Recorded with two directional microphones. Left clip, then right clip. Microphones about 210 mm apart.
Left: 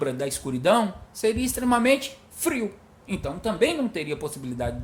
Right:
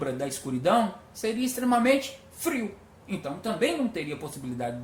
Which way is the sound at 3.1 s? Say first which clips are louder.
Left 3 dB; 50° left (ahead or behind).